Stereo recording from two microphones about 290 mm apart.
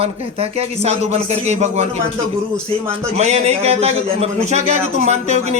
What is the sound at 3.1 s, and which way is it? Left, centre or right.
A man's voice, right.